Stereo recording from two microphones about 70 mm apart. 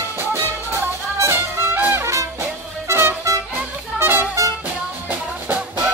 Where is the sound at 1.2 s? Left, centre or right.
Right.